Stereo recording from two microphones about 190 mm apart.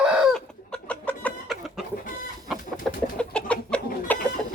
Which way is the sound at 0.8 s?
5° left (ahead or behind).